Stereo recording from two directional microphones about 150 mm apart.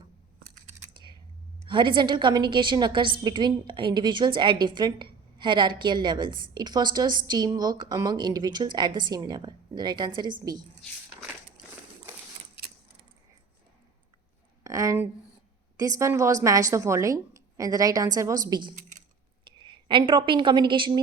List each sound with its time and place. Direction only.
0.9 s typing: 30° right (ahead or behind)
1.6 s a woman's voice: 30° right (ahead or behind)
14.6 s a sound: 20° right (ahead or behind)
15.8 s a woman's voice: 20° right (ahead or behind)